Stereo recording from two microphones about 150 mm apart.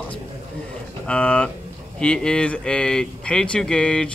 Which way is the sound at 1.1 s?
10° left (ahead or behind).